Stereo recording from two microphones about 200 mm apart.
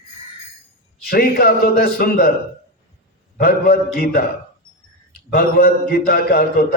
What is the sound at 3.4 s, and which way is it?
Speech, 45° left (ahead or behind).